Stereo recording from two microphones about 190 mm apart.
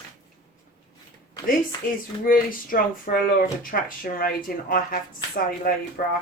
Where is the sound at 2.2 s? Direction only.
45° left (ahead or behind).